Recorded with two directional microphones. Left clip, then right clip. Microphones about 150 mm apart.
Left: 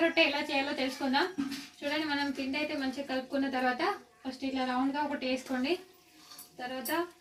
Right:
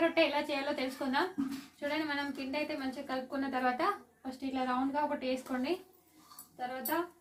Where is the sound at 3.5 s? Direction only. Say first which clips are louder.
Even; 20° right (ahead or behind).